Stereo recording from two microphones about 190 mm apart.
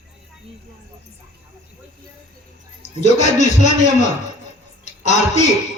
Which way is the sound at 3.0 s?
40° left (ahead or behind).